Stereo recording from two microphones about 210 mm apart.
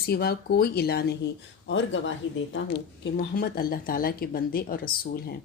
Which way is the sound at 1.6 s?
60° left (ahead or behind).